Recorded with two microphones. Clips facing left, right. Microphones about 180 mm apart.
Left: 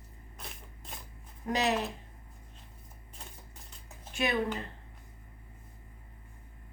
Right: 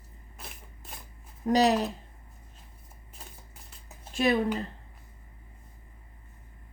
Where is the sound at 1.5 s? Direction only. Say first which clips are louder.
Right 7 dB; 35° right (ahead or behind).